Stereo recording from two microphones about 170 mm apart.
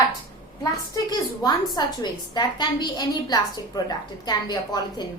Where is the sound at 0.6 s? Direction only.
25° left (ahead or behind).